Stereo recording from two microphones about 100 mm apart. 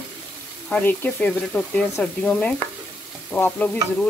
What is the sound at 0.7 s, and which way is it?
Speech, 15° left (ahead or behind).